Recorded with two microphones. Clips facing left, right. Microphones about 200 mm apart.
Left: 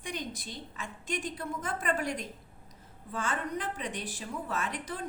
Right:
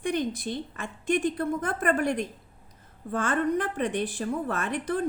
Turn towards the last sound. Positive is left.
turn(degrees=-55)  # may be behind; listen again after turning